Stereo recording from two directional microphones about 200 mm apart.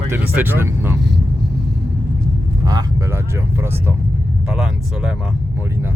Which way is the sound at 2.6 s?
20° right (ahead or behind).